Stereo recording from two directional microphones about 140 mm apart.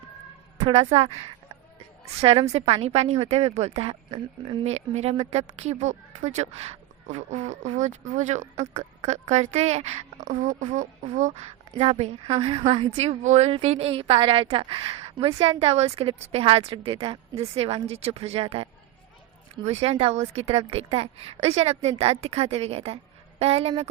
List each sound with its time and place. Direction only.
0.7 s a woman's voice: 50° right (ahead or behind)
2.2 s a woman's voice: 45° right (ahead or behind)